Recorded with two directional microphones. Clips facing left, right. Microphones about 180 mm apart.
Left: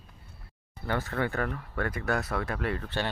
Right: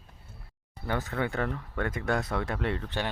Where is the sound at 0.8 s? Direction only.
15° right (ahead or behind).